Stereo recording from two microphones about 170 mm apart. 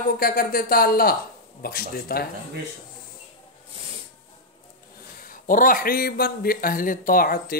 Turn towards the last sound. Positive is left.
turn(degrees=60)  # may be behind; listen again after turning